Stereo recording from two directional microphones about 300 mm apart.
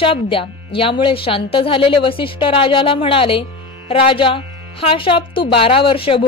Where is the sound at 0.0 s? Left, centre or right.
Centre.